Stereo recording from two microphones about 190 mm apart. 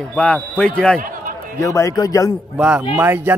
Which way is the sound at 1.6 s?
15° left (ahead or behind).